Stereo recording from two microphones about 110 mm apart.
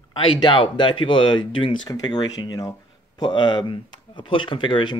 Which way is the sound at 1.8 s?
35° left (ahead or behind).